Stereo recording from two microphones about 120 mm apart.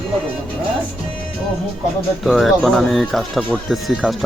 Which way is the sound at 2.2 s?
Centre (ahead or behind).